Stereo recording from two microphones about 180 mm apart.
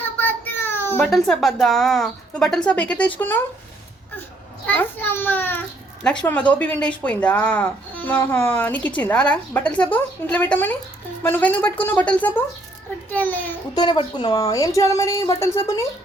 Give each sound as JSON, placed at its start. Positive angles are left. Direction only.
{"t": 0.2, "sound": "a child's voice", "side_deg": 10}
{"t": 4.6, "sound": "speech", "side_deg": 10}
{"t": 13.7, "sound": "speech", "side_deg": 25}